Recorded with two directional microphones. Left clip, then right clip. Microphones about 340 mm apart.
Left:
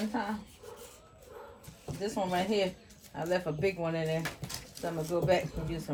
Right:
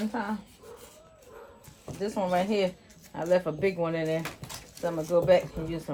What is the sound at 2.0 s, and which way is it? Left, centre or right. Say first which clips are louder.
Speech: right 4 dB; right.